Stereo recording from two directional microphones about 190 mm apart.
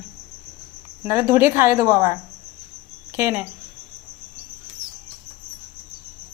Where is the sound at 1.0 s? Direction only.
15° right (ahead or behind).